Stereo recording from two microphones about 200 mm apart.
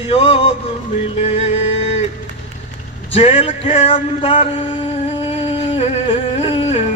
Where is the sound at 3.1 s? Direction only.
30° left (ahead or behind).